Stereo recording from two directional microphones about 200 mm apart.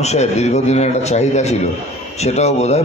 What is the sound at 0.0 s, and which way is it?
A man's voice, 35° left (ahead or behind).